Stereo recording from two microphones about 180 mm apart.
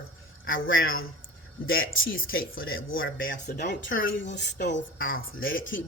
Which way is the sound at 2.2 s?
55° left (ahead or behind).